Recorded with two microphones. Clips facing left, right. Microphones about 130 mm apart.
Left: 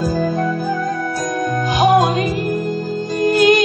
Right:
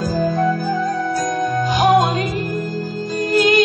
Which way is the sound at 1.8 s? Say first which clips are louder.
Left 2 dB; 15° left (ahead or behind).